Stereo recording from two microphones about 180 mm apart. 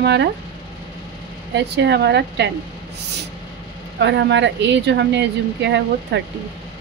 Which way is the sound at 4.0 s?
75° right (ahead or behind).